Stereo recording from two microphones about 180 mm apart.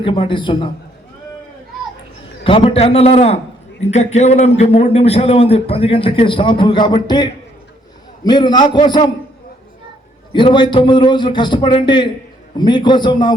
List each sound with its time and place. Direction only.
0.0 s a man's voice: 30° left (ahead or behind)
2.4 s a man's voice: 30° left (ahead or behind)
10.3 s a man's voice: 25° left (ahead or behind)